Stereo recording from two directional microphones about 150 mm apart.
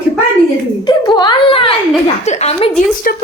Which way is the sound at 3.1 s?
75° left (ahead or behind).